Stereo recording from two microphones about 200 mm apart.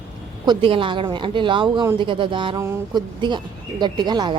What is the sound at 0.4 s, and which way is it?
A woman's voice, 25° right (ahead or behind).